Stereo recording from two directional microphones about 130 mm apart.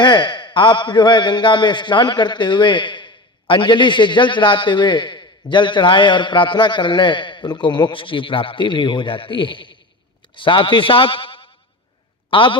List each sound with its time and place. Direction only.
0.0 s a man's voice: 35° left (ahead or behind)